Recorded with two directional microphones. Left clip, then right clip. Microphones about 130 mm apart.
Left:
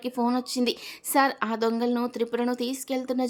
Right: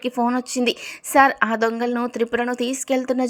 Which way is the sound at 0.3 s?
30° right (ahead or behind).